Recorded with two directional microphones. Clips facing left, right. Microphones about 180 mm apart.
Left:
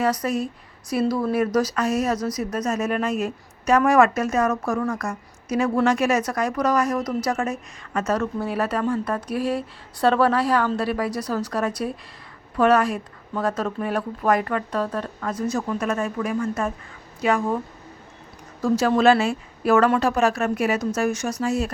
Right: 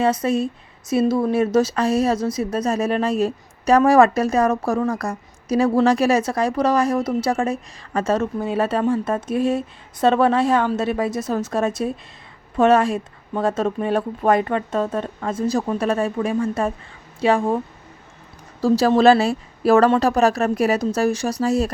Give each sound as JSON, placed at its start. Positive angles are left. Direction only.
{"t": 0.0, "sound": "speech", "side_deg": -25}
{"t": 18.6, "sound": "a woman's voice", "side_deg": -35}